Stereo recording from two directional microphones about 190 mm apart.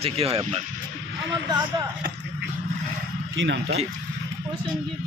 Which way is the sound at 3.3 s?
75° right (ahead or behind).